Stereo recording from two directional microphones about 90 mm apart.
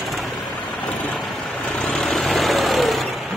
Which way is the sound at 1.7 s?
Centre (ahead or behind).